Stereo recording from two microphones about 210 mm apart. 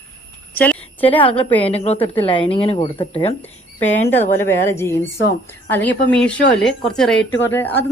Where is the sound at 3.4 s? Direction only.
10° left (ahead or behind).